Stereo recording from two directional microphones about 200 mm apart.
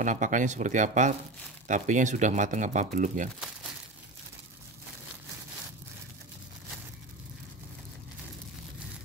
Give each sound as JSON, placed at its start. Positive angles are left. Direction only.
{"t": 0.0, "sound": "speech", "side_deg": -40}